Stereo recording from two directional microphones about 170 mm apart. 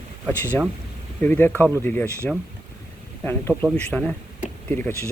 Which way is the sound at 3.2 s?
10° left (ahead or behind).